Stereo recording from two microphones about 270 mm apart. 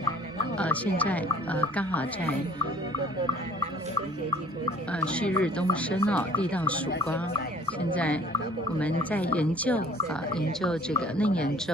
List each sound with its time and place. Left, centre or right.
0.6 s speech: centre
5.0 s speech: centre
7.9 s speech: centre